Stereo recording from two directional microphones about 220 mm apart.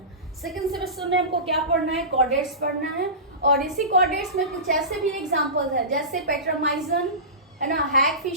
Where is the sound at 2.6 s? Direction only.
45° right (ahead or behind).